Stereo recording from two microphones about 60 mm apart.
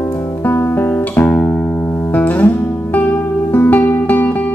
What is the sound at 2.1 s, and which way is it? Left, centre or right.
Music, left.